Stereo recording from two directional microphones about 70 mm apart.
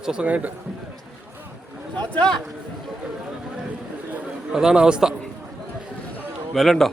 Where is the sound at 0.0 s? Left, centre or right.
Centre.